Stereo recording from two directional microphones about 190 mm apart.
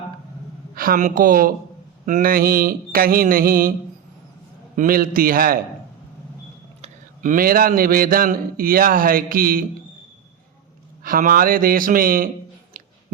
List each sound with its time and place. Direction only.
0.8 s a man's voice: 45° right (ahead or behind)
4.8 s a man's voice: 50° right (ahead or behind)
6.8 s a man's voice: 45° right (ahead or behind)
11.0 s a man's voice: 50° right (ahead or behind)